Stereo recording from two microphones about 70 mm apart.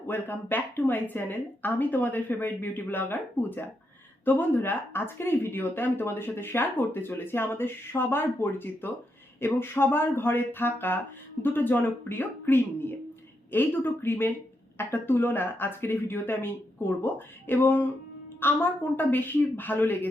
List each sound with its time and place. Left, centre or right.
0.1 s a woman's voice: left